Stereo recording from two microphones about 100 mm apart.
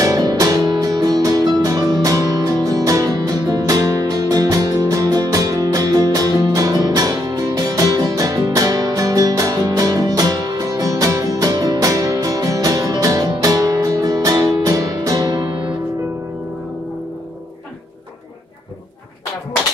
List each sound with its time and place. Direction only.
0.0 s music: 35° right (ahead or behind)